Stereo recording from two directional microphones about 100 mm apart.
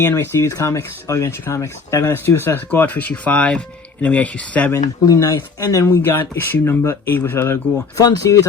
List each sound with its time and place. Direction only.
0.0 s speech: 20° left (ahead or behind)
4.7 s speech: 35° left (ahead or behind)